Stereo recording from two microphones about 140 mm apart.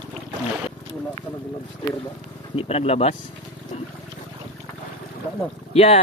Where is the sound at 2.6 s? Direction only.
45° left (ahead or behind).